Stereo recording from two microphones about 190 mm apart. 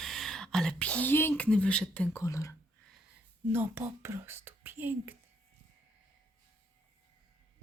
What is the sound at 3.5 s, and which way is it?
Speech, 10° right (ahead or behind).